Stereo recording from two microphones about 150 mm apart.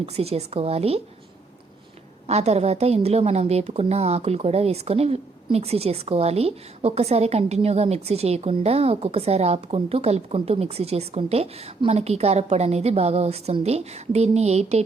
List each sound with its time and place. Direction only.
0.0 s a woman's voice: 40° right (ahead or behind)
2.2 s a woman's voice: 45° right (ahead or behind)